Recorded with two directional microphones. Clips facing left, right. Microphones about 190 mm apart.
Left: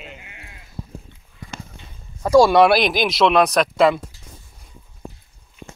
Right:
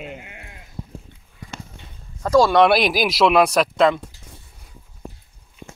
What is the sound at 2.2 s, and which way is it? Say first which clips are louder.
Speech: left 2 dB; 10° left (ahead or behind).